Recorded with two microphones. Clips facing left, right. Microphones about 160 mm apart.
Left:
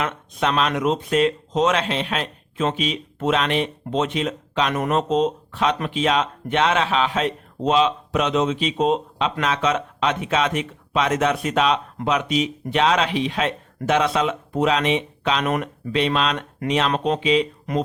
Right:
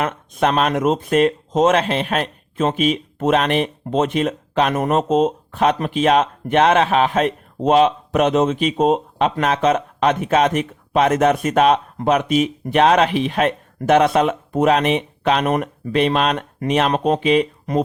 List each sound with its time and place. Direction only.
0.0 s speech: 50° right (ahead or behind)
15.4 s speech: 45° right (ahead or behind)